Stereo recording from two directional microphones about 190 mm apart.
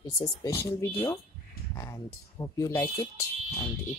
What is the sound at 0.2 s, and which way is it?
Speech, 20° left (ahead or behind).